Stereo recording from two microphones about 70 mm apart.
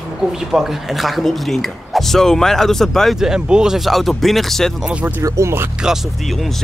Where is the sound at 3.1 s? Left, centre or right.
Centre.